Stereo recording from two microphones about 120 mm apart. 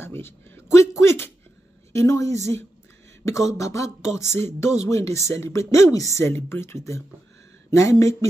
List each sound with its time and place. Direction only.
0.0 s speech: 20° left (ahead or behind)